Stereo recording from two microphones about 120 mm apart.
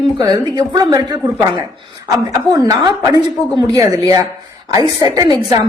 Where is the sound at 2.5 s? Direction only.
30° right (ahead or behind).